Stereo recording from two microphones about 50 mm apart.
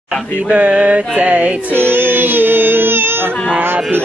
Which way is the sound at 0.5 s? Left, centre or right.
Right.